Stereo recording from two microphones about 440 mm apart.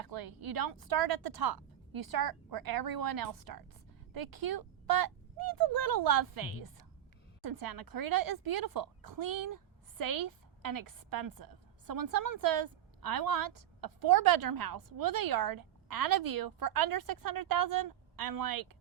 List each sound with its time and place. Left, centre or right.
0.0 s a woman's voice: right